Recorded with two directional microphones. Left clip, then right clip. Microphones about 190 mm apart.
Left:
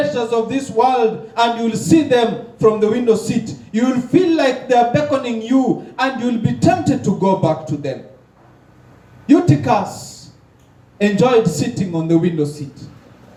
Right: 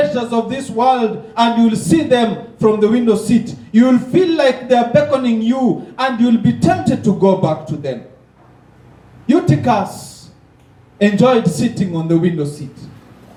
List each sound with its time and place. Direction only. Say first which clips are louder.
0.1 s a man's voice: even; 50° left (ahead or behind)
9.2 s a man's voice: even; 50° left (ahead or behind)
10.9 s a man's voice: right 1 dB; 50° left (ahead or behind)